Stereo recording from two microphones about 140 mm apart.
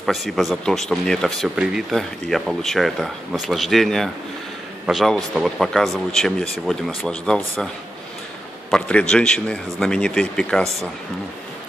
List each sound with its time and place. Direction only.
0.0 s a man's voice: centre (ahead or behind)